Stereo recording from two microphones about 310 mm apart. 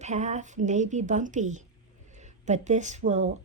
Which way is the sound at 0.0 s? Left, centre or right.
Right.